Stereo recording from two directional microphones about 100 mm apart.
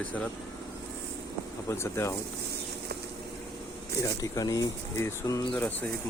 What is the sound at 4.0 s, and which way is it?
Speech, 35° left (ahead or behind).